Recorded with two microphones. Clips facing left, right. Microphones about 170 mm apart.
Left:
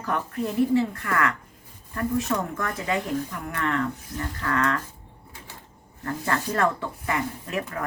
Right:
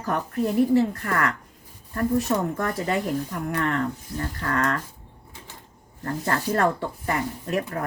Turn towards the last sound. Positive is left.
turn(degrees=-35)  # may be behind; listen again after turning